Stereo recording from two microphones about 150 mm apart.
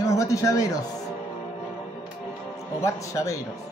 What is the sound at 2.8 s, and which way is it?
Speech, 20° left (ahead or behind).